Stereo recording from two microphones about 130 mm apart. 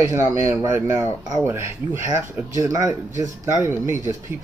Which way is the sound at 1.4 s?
20° right (ahead or behind).